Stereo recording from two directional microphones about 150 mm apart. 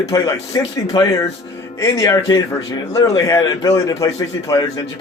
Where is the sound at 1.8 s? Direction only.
20° left (ahead or behind).